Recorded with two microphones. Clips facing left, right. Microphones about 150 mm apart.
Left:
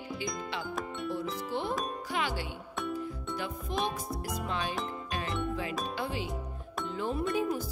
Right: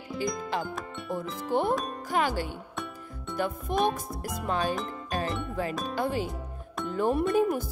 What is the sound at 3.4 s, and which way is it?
Speech, 50° right (ahead or behind).